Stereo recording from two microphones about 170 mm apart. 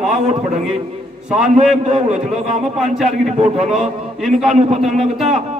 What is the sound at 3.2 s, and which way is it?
Speech, 40° right (ahead or behind).